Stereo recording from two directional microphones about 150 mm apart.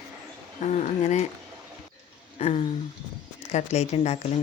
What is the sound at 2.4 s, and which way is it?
Speech, 45° left (ahead or behind).